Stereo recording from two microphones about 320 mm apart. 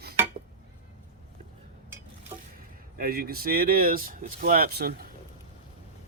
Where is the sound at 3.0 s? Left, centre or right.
Right.